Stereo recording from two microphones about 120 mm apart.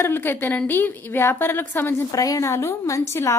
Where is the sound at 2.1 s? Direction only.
30° left (ahead or behind).